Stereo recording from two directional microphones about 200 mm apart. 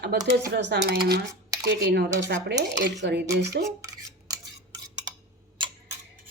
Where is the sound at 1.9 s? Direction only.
55° right (ahead or behind).